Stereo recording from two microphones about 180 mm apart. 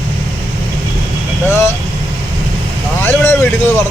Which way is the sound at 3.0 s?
15° left (ahead or behind).